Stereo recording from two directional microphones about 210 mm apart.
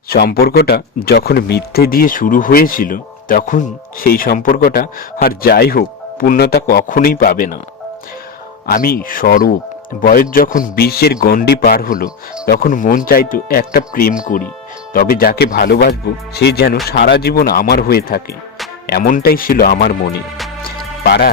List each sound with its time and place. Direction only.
0.1 s speech: 50° left (ahead or behind)
8.6 s speech: 45° left (ahead or behind)